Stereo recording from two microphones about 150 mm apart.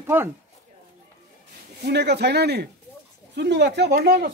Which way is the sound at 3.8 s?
90° right.